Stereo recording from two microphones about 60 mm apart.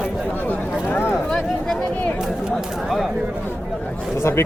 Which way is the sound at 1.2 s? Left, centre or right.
Centre.